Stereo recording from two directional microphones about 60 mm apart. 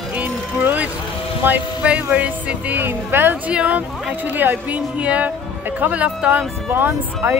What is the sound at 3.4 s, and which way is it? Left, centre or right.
Speech, right.